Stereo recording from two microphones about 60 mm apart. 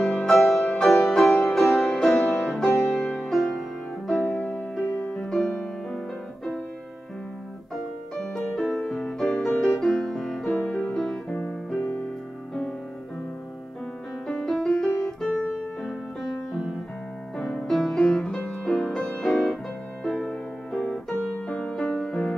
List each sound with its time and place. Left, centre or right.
0.3 s music: centre
2.9 s music: centre
3.3 s music: centre
4.4 s music: centre
7.7 s music: centre
14.2 s music: centre
14.7 s piano: centre
15.8 s music: centre